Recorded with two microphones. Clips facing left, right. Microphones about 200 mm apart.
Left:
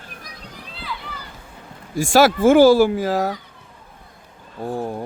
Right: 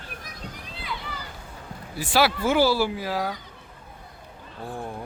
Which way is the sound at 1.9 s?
45° left (ahead or behind).